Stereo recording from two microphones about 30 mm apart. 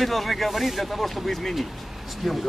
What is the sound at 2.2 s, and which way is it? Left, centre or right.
Speech, centre.